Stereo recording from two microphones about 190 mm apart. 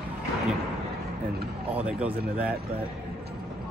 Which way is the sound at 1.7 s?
10° right (ahead or behind).